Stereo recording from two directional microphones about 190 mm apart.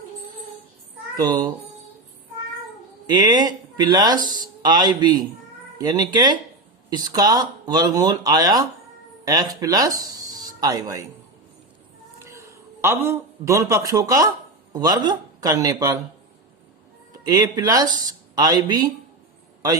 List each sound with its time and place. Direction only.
1.1 s a child's voice: 20° right (ahead or behind)
3.1 s speech: 20° right (ahead or behind)
12.2 s a man's voice: 15° right (ahead or behind)
17.2 s speech: 20° right (ahead or behind)